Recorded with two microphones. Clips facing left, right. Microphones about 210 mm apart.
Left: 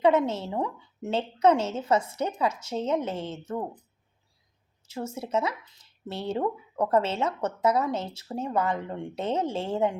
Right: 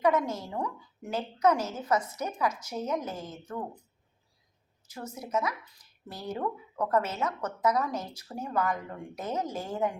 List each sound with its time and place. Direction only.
0.0 s speech: 25° left (ahead or behind)
4.9 s speech: 25° left (ahead or behind)